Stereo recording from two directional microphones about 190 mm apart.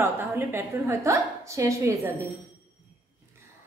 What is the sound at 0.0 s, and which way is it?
A woman's voice, 10° right (ahead or behind).